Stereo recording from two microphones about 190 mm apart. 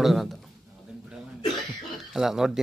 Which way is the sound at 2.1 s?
Centre (ahead or behind).